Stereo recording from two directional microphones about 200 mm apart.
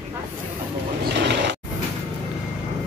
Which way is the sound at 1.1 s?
60° right (ahead or behind).